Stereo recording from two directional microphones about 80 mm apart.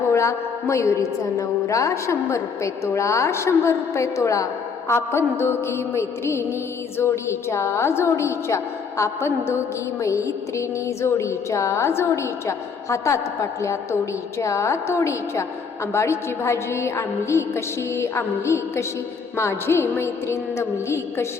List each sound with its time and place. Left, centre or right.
0.1 s music: left